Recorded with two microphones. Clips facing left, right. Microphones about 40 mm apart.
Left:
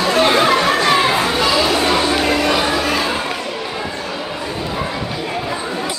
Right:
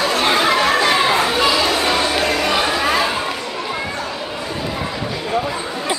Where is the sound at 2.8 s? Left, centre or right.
Centre.